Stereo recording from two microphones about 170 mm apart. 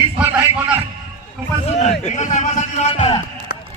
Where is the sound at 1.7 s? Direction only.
40° left (ahead or behind).